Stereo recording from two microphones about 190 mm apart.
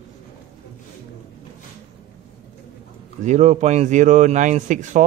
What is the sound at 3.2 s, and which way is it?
Speech, 40° right (ahead or behind).